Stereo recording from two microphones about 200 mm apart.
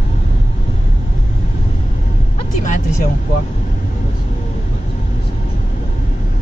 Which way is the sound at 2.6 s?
40° left (ahead or behind).